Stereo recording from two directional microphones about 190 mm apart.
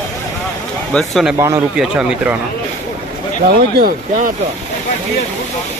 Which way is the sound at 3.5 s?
50° right (ahead or behind).